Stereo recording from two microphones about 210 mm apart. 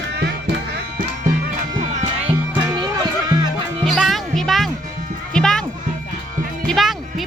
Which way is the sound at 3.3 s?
20° right (ahead or behind).